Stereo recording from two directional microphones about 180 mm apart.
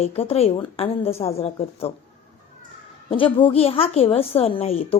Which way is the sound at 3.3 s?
30° left (ahead or behind).